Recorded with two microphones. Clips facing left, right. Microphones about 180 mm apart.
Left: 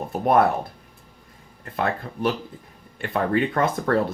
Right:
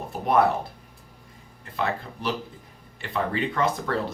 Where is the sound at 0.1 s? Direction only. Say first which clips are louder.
Left 3 dB; 55° left (ahead or behind).